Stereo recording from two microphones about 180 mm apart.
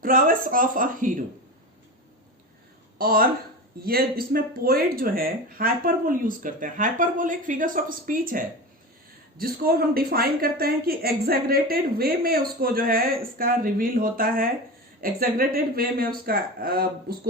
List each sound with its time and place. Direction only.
0.0 s speech: 50° right (ahead or behind)
3.0 s speech: 55° right (ahead or behind)